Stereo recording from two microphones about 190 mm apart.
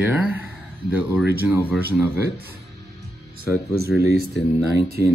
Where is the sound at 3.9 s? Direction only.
5° right (ahead or behind).